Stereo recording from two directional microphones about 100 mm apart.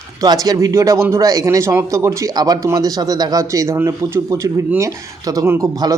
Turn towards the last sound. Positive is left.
turn(degrees=-30)  # may be behind; listen again after turning